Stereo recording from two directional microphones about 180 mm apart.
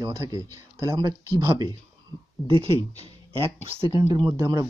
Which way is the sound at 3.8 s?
25° left (ahead or behind).